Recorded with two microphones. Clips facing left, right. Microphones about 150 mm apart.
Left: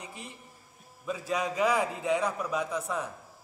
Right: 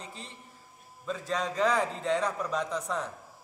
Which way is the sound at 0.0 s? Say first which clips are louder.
Left 1 dB; 15° left (ahead or behind).